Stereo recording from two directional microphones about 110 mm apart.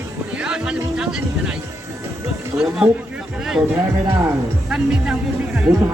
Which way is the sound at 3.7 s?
25° right (ahead or behind).